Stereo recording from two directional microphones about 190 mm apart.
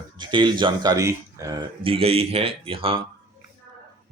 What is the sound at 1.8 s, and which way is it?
Speech, 30° right (ahead or behind).